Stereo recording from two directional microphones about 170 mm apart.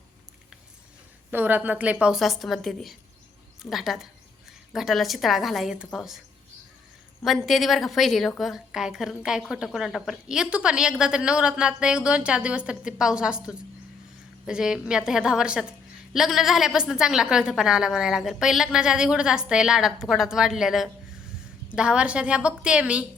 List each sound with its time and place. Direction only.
1.3 s a woman's voice: 10° right (ahead or behind)
7.3 s a woman's voice: centre (ahead or behind)